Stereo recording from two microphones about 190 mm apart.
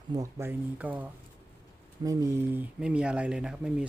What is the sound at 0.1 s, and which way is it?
Speech, 15° right (ahead or behind).